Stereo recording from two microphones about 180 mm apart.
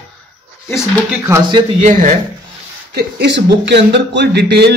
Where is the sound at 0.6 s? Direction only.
15° left (ahead or behind).